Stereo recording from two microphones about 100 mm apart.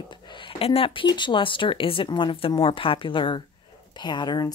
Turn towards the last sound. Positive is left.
turn(degrees=45)  # may be behind; listen again after turning